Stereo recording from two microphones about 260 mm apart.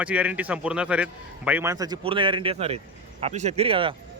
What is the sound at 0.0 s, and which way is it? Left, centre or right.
A man's voice, centre.